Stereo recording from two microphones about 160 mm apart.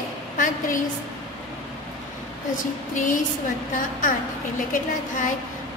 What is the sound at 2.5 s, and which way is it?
Speech, 55° left (ahead or behind).